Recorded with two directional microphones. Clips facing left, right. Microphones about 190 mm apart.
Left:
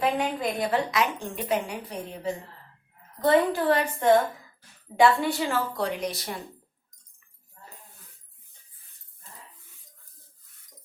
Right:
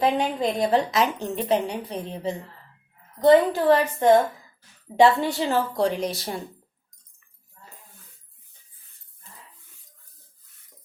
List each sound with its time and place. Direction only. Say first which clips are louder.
0.0 s a woman's voice: right 3 dB; 25° right (ahead or behind)